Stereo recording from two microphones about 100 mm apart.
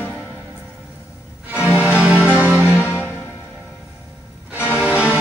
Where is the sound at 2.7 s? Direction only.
25° left (ahead or behind).